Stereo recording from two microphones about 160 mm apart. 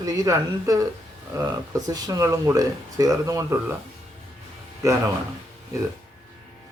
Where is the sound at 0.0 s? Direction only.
20° right (ahead or behind).